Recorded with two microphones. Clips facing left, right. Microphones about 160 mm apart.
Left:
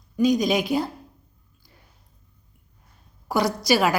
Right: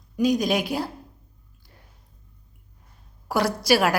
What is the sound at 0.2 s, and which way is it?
Speech, 5° right (ahead or behind).